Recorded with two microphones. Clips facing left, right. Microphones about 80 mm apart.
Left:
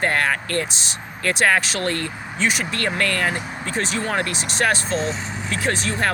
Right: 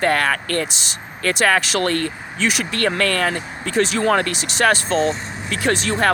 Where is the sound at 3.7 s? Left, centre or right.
Right.